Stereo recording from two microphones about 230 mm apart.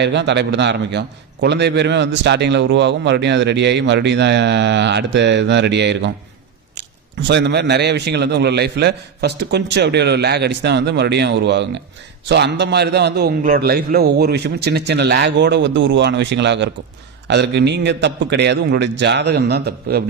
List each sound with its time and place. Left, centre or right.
0.0 s a man's voice: right